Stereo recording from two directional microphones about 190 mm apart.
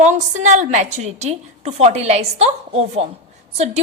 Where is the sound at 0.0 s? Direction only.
40° right (ahead or behind).